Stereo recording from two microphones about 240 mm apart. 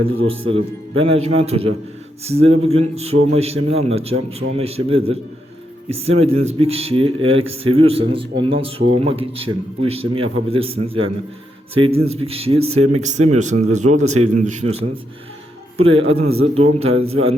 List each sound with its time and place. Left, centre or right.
0.0 s speech: right
1.1 s a man's voice: right
15.8 s a man's voice: right